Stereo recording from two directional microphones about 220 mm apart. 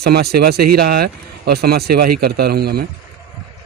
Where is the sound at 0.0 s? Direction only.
45° right (ahead or behind).